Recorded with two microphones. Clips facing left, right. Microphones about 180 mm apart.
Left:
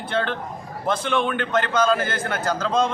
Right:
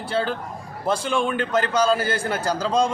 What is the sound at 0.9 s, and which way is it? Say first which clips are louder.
A man's voice: even; 10° right (ahead or behind).